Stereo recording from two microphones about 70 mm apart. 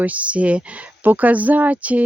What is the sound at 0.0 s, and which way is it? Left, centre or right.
Speech, centre.